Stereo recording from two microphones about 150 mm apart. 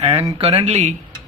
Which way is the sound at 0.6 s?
45° right (ahead or behind).